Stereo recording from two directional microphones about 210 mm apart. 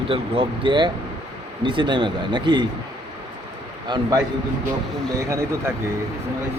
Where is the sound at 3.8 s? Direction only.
20° right (ahead or behind).